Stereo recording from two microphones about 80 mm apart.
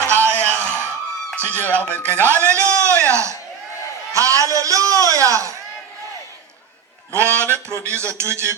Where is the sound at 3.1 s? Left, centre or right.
Right.